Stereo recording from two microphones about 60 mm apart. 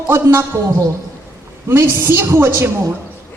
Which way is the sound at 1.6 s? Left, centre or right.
Right.